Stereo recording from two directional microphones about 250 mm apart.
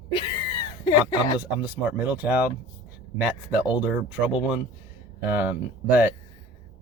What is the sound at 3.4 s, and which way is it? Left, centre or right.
Speech, centre.